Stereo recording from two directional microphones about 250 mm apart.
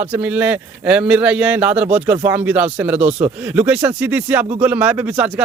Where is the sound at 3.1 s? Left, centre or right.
Right.